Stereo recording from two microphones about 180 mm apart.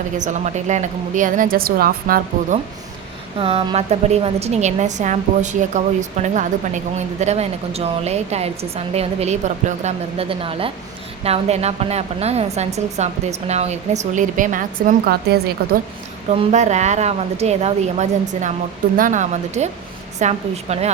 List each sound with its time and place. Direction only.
0.2 s a woman's voice: 40° right (ahead or behind)
3.3 s a woman's voice: 30° right (ahead or behind); by 15.8 s 60° right (ahead or behind)
16.3 s a woman's voice: 35° right (ahead or behind)